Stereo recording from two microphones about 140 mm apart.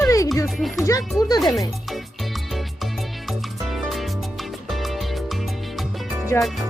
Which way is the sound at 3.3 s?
Centre (ahead or behind).